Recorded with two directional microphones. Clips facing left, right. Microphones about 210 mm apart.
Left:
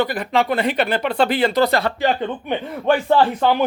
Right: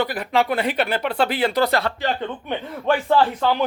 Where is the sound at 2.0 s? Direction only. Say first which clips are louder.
Left 5 dB; 15° left (ahead or behind).